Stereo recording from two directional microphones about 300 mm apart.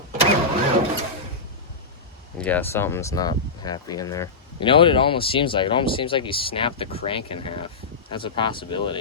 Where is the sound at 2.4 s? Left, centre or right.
Centre.